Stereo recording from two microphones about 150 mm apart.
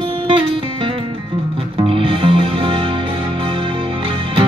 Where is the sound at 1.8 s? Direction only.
35° right (ahead or behind).